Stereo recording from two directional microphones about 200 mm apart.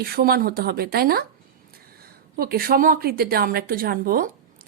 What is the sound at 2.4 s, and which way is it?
A woman's voice, 50° right (ahead or behind).